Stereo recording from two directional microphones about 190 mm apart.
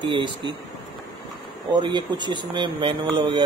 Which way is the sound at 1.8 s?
25° right (ahead or behind).